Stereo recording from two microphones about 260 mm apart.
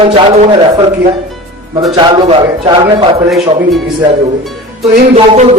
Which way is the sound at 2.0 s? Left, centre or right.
Centre.